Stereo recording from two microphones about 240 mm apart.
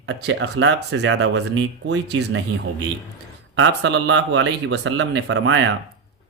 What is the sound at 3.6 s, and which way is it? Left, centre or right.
Speech, right.